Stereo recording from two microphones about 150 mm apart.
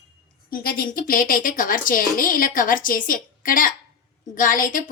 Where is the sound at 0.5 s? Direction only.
80° left.